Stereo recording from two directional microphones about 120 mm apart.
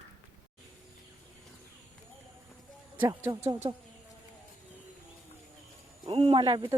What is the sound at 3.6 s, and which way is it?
Speech, 35° right (ahead or behind).